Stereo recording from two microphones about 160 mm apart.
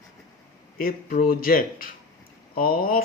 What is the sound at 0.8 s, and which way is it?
Speech, 60° left (ahead or behind).